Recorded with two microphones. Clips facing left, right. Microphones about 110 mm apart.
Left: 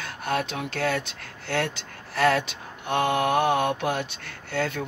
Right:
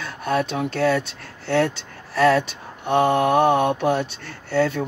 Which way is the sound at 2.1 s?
35° right (ahead or behind).